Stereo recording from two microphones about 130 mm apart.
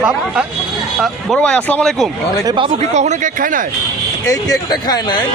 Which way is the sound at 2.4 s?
40° right (ahead or behind).